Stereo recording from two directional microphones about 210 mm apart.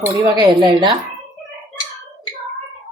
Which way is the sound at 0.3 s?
20° right (ahead or behind).